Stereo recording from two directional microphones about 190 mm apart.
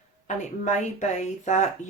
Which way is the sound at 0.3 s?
40° left (ahead or behind).